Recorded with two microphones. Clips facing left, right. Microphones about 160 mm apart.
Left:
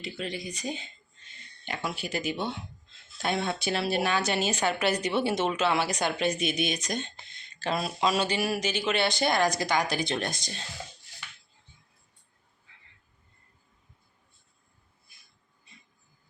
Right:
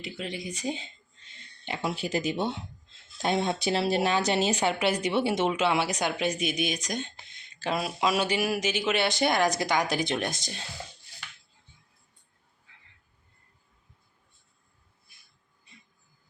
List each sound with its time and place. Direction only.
0.0 s speech: 15° right (ahead or behind)
4.5 s speech: 20° right (ahead or behind)
8.9 s speech: 20° right (ahead or behind)